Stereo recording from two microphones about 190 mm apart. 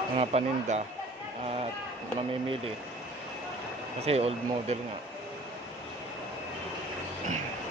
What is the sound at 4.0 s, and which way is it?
Speech, 35° right (ahead or behind).